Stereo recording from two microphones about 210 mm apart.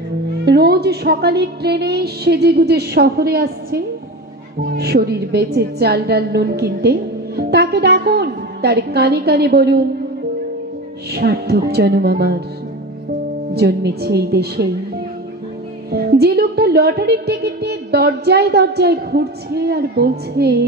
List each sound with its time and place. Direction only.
0.5 s a woman's voice: 50° right (ahead or behind)
11.1 s a woman's voice: 50° right (ahead or behind)
13.5 s a woman's voice: 50° right (ahead or behind)
15.9 s a woman's voice: 50° right (ahead or behind)